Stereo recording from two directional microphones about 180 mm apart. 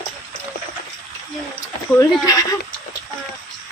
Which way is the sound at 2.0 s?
20° left (ahead or behind).